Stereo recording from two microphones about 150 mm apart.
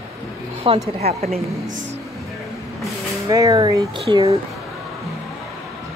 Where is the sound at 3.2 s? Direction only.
20° right (ahead or behind).